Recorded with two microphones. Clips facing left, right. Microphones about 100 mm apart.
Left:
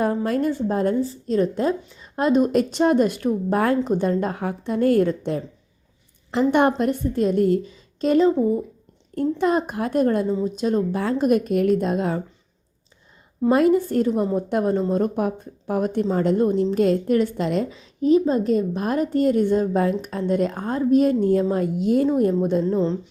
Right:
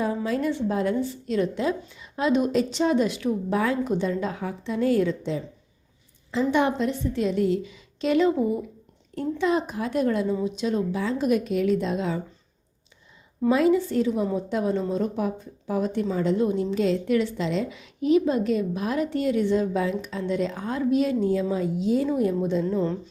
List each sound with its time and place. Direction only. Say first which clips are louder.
0.3 s a woman's voice: left 3 dB; 45° left (ahead or behind)
13.5 s a woman's voice: left 3 dB; 50° left (ahead or behind)
17.7 s a woman's voice: left 4 dB; 35° left (ahead or behind)
22.6 s speech: left 4 dB; 30° left (ahead or behind)